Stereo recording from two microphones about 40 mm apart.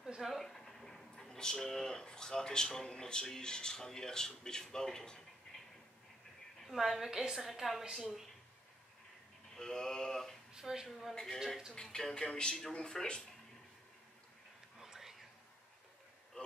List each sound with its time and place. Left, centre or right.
0.0 s a sound: centre
0.3 s speech: centre
6.7 s a woman's voice: centre
9.6 s mantra: centre
10.5 s a woman's voice: centre
11.7 s speech: centre
14.8 s whispering: centre